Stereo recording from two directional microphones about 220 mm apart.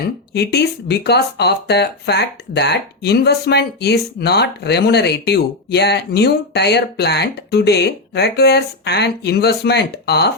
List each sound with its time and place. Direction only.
0.3 s speech: 50° left (ahead or behind)